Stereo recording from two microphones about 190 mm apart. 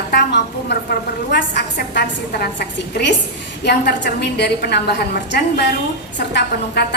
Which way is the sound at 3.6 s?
60° left (ahead or behind).